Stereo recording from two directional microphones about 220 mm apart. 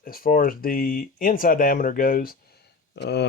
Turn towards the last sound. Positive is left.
turn(degrees=50)  # may be behind; listen again after turning